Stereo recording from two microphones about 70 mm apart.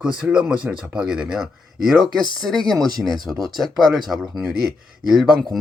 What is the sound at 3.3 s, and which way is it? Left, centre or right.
Speech, centre.